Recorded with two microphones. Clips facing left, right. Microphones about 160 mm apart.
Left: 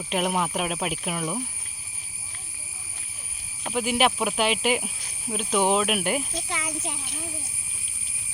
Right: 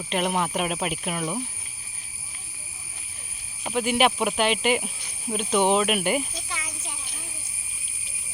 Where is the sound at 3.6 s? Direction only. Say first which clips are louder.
Right 1 dB; centre (ahead or behind).